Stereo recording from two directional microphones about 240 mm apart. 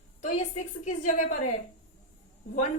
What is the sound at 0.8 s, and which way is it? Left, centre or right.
Speech, left.